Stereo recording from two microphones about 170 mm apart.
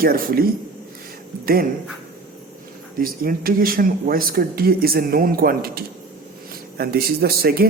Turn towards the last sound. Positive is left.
turn(degrees=-65)  # may be behind; listen again after turning